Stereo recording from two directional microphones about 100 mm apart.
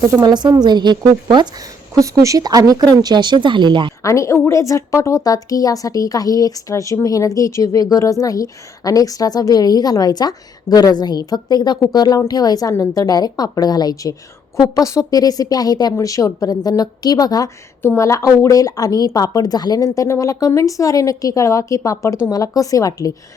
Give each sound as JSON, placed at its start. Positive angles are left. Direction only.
{"t": 0.0, "sound": "speech", "side_deg": -35}
{"t": 2.0, "sound": "speech", "side_deg": -35}
{"t": 4.0, "sound": "a woman's voice", "side_deg": 30}